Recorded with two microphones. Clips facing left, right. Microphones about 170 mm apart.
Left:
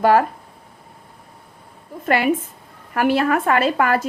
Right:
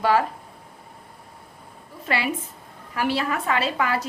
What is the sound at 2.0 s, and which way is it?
A woman's voice, 50° left (ahead or behind).